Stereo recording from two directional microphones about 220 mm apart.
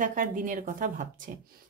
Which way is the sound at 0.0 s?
35° right (ahead or behind).